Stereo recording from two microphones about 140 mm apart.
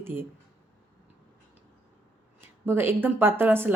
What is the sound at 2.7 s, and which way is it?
Speech, 15° right (ahead or behind).